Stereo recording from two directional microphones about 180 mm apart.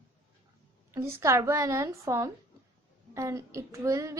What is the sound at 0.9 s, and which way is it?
Speech, 15° right (ahead or behind).